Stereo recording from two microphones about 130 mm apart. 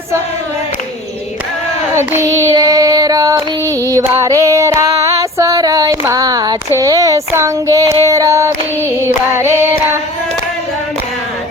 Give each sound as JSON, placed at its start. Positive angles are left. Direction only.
{"t": 2.3, "sound": "child singing", "side_deg": -20}
{"t": 3.8, "sound": "female singing", "side_deg": -20}
{"t": 6.7, "sound": "speech", "side_deg": -25}
{"t": 8.0, "sound": "female singing", "side_deg": -25}
{"t": 9.0, "sound": "child singing", "side_deg": -20}